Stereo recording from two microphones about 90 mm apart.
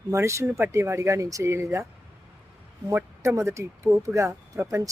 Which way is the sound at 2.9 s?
30° right (ahead or behind).